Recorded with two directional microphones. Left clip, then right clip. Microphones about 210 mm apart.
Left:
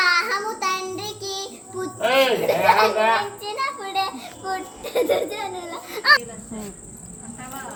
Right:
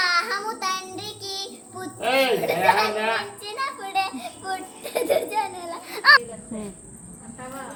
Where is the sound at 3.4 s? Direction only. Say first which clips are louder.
Left 3 dB; 20° right (ahead or behind).